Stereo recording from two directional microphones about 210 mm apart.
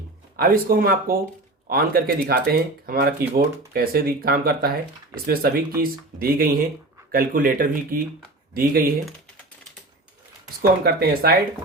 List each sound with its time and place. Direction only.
0.3 s speech: 45° right (ahead or behind)
10.6 s speech: 45° right (ahead or behind)